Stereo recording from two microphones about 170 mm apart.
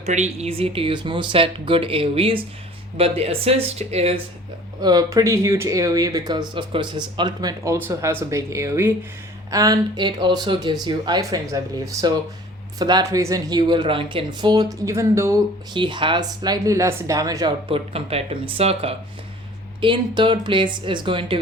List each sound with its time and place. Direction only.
0.0 s speech: 40° right (ahead or behind)
4.8 s speech: 25° right (ahead or behind)